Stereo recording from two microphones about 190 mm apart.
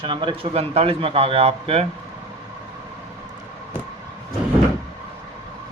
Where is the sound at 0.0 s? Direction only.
25° right (ahead or behind).